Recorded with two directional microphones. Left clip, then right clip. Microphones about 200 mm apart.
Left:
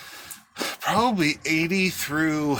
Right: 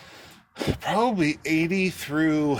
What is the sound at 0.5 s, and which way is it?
Speech, 10° right (ahead or behind).